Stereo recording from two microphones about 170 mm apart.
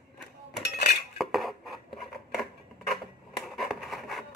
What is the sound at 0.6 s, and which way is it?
Dishes, 75° left (ahead or behind).